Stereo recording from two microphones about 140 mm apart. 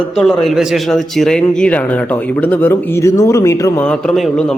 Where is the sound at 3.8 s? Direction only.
5° left (ahead or behind).